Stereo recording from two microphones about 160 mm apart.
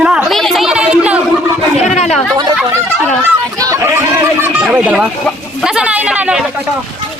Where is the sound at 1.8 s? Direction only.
45° left (ahead or behind).